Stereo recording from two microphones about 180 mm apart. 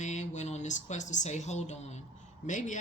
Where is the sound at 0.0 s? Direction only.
40° left (ahead or behind).